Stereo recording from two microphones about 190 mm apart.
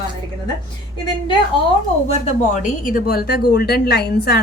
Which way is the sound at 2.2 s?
40° left (ahead or behind).